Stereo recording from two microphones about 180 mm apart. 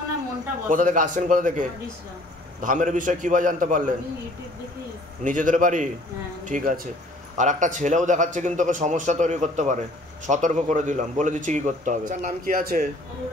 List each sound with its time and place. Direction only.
0.7 s speech: 45° right (ahead or behind)
5.2 s speech: 45° right (ahead or behind)